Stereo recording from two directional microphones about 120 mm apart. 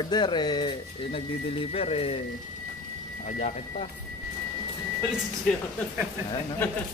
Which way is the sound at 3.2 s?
80° left.